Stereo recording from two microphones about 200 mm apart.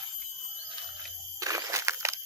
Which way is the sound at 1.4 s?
15° right (ahead or behind).